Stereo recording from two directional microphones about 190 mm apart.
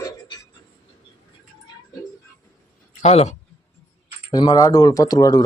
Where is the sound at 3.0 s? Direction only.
35° left (ahead or behind).